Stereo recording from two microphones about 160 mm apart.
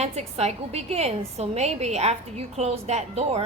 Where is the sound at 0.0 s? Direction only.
40° right (ahead or behind).